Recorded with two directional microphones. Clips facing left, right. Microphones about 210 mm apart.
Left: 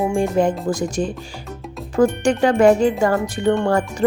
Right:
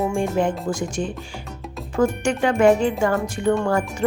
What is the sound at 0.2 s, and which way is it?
Speech, 40° left (ahead or behind).